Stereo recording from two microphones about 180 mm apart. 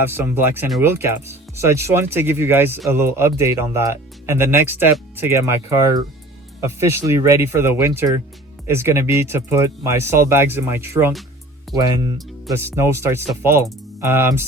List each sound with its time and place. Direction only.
0.0 s speech: 10° right (ahead or behind)